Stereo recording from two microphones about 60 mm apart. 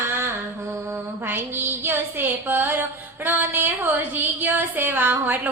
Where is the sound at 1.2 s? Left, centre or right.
Right.